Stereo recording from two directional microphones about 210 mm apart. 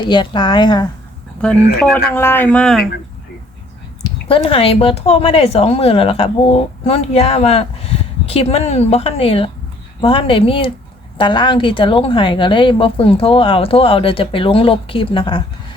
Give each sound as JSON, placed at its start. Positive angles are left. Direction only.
{"t": 0.0, "sound": "speech", "side_deg": 20}
{"t": 2.1, "sound": "speech", "side_deg": 10}
{"t": 4.0, "sound": "speech", "side_deg": 25}